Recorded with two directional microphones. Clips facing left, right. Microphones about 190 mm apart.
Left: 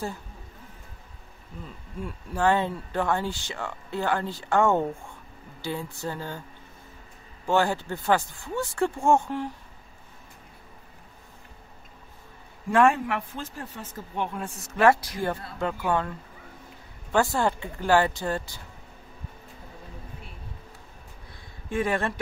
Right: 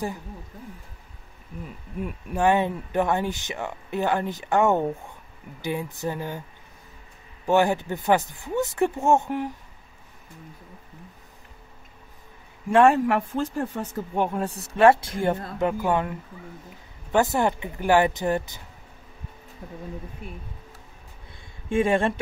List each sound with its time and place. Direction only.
1.6 s speech: 15° right (ahead or behind)
7.4 s speech: 20° right (ahead or behind)
12.7 s speech: 35° right (ahead or behind); by 18.6 s 20° right (ahead or behind)
21.6 s speech: 25° right (ahead or behind)